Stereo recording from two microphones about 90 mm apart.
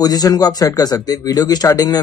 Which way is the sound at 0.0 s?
45° left (ahead or behind).